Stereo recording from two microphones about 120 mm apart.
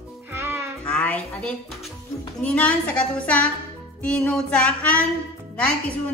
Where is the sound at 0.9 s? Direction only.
10° left (ahead or behind).